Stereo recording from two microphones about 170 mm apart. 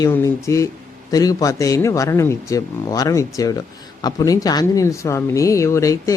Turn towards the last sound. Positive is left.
turn(degrees=20)  # may be behind; listen again after turning